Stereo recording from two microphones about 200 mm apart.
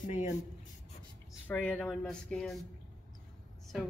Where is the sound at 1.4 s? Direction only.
5° left (ahead or behind).